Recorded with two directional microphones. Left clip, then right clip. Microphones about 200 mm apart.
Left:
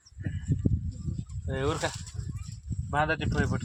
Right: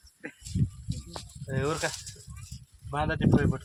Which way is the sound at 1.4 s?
10° left (ahead or behind).